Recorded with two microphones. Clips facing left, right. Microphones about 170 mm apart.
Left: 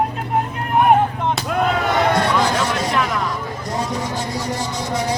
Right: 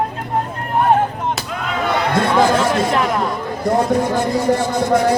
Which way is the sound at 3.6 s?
55° right (ahead or behind).